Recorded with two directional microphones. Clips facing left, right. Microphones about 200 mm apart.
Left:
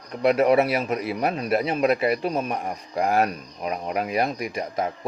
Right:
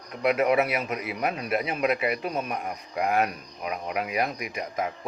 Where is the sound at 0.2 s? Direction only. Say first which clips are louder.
Left 4 dB; 35° left (ahead or behind).